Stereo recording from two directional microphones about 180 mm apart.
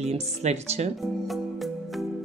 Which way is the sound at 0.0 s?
35° right (ahead or behind).